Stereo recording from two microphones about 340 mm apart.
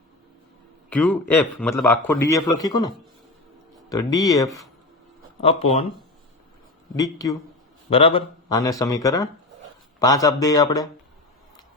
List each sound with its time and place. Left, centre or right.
0.9 s a man's voice: centre
6.9 s speech: centre